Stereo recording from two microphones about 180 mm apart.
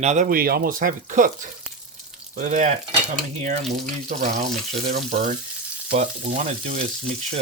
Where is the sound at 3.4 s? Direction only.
40° right (ahead or behind).